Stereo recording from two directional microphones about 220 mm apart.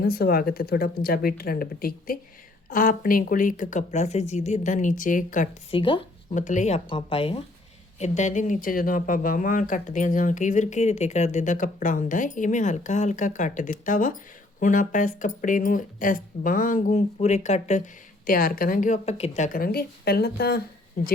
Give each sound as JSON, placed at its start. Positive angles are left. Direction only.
{"t": 0.0, "sound": "speech", "side_deg": 45}
{"t": 5.7, "sound": "speech", "side_deg": 25}
{"t": 6.3, "sound": "speech", "side_deg": 35}